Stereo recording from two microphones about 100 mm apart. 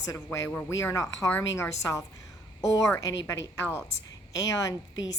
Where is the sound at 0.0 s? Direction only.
35° left (ahead or behind).